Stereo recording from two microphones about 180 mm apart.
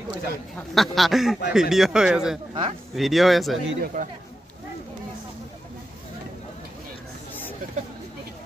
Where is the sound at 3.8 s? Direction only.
45° right (ahead or behind).